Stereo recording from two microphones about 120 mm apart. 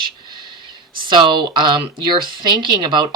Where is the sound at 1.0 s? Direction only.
40° right (ahead or behind).